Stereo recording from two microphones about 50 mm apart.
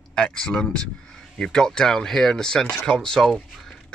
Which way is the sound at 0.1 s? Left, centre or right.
Centre.